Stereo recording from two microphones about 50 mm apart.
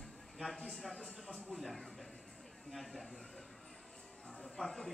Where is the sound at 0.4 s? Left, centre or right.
Centre.